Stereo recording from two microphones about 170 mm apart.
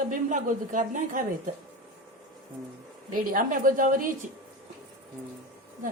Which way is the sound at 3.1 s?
55° right (ahead or behind).